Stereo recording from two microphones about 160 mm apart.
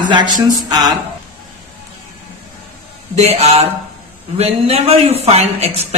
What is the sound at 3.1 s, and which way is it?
Speech, 40° right (ahead or behind).